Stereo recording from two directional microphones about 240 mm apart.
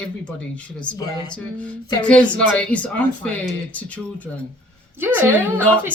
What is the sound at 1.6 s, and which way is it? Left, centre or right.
Speech, centre.